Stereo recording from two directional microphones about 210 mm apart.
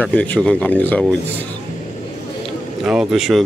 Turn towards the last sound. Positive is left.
turn(degrees=0)  # may be behind; listen again after turning